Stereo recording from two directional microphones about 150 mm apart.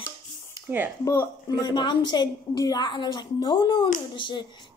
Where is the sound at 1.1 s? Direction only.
25° left (ahead or behind).